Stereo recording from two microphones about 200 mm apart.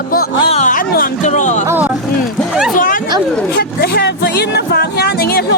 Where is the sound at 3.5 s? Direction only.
55° left (ahead or behind).